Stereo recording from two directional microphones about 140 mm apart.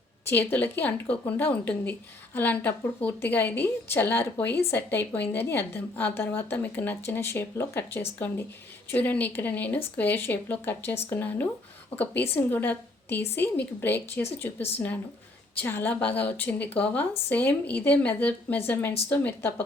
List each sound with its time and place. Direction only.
0.3 s speech: 15° left (ahead or behind)
15.6 s speech: 15° left (ahead or behind)